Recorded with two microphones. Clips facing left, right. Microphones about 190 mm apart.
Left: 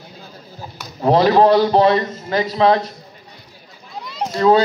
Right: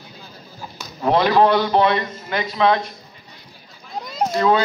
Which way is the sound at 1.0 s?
35° left (ahead or behind).